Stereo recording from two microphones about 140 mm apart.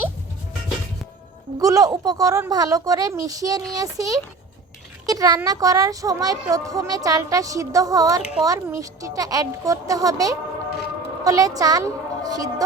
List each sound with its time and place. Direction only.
1.5 s a woman's voice: 25° right (ahead or behind)